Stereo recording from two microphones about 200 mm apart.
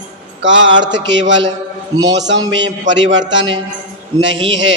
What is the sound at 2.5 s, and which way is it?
Speech, 65° right (ahead or behind).